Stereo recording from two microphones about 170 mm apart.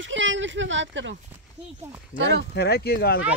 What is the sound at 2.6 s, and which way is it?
Speech, 70° left (ahead or behind).